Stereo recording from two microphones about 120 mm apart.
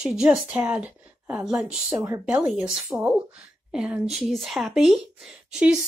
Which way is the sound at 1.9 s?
25° right (ahead or behind).